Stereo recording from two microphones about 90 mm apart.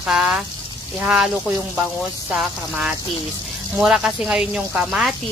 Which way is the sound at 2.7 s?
10° right (ahead or behind).